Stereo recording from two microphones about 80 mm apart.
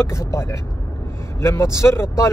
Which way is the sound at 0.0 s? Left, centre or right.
Left.